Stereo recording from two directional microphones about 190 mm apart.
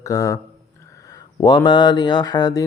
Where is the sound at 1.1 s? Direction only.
20° left (ahead or behind).